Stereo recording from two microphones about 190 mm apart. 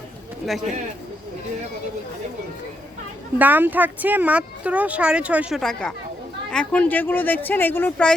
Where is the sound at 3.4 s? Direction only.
10° right (ahead or behind).